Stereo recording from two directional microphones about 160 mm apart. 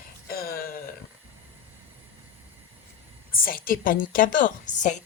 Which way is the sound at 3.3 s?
65° left (ahead or behind).